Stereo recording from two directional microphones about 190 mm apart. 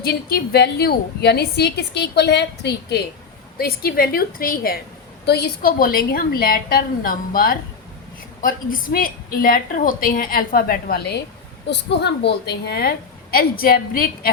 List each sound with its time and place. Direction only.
0.0 s a woman's voice: 55° left (ahead or behind)